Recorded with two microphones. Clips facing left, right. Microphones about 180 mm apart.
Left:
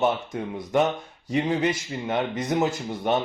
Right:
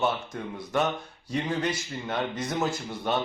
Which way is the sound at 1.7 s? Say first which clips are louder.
Left 4 dB; 20° left (ahead or behind).